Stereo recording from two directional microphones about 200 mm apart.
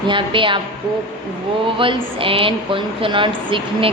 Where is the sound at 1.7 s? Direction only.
25° right (ahead or behind).